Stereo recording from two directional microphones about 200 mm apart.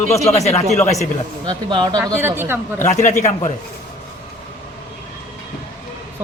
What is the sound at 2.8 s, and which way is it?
Speech, 35° left (ahead or behind).